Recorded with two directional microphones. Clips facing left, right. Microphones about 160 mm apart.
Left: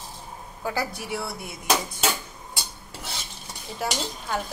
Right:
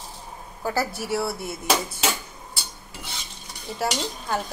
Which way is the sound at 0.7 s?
5° right (ahead or behind).